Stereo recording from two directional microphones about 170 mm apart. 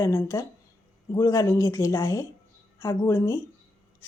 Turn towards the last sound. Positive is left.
turn(degrees=20)  # may be behind; listen again after turning